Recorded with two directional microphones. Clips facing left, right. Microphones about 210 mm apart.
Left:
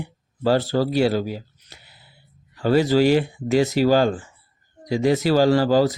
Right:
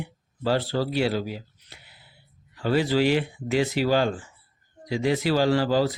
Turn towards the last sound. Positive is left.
turn(degrees=40)  # may be behind; listen again after turning